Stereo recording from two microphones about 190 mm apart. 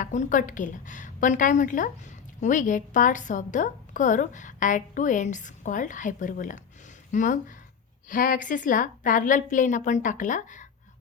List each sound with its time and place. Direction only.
0.0 s a woman's voice: 40° left (ahead or behind)